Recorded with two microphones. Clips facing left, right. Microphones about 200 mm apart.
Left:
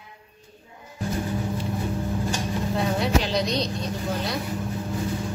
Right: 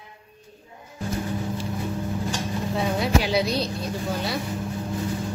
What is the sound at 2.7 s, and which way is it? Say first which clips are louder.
Vehicle: right 1 dB; centre (ahead or behind).